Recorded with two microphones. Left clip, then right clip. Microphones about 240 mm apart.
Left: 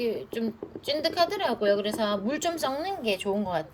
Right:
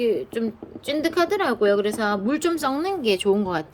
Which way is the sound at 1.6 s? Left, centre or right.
Right.